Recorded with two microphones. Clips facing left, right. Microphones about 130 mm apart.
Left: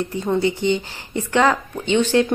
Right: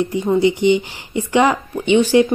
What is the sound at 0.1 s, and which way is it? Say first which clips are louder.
Speech: right 4 dB; 15° right (ahead or behind).